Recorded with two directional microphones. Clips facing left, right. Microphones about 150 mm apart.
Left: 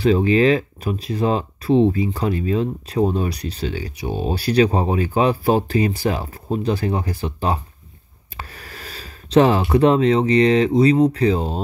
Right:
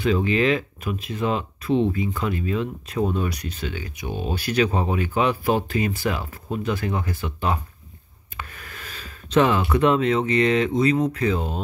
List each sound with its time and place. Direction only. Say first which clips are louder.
0.0 s speech: left 5 dB; 35° left (ahead or behind)